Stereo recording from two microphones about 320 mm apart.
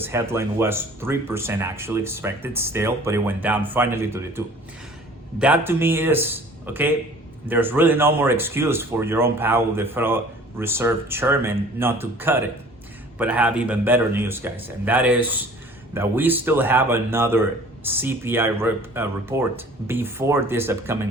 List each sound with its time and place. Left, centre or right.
0.0 s a man's voice: centre